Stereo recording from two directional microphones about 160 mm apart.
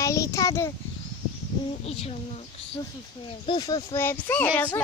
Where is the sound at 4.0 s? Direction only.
10° left (ahead or behind).